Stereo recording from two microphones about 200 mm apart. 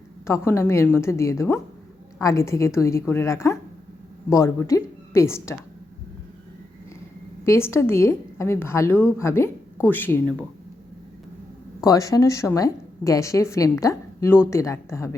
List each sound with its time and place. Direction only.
0.3 s a woman's voice: 15° left (ahead or behind)
7.4 s a woman's voice: 15° left (ahead or behind)
11.8 s a woman's voice: 15° left (ahead or behind)